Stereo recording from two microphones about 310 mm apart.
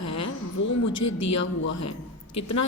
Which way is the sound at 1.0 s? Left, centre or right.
Left.